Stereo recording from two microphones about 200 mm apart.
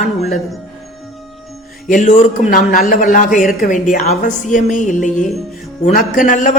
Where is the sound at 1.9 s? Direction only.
40° left (ahead or behind).